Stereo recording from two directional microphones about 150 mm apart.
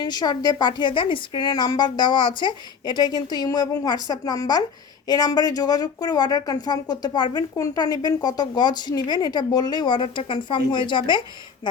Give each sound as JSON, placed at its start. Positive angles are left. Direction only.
{"t": 0.0, "sound": "speech", "side_deg": 30}